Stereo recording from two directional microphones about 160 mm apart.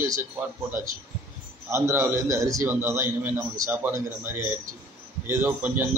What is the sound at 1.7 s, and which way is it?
A man's voice, 15° right (ahead or behind).